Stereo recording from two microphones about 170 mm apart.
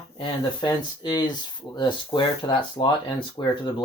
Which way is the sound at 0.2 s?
30° left (ahead or behind).